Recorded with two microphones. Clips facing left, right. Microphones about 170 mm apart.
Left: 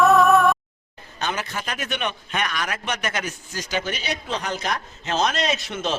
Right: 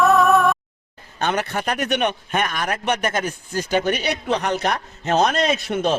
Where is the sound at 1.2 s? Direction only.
60° right (ahead or behind).